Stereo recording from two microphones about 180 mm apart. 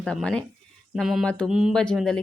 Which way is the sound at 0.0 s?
5° left (ahead or behind).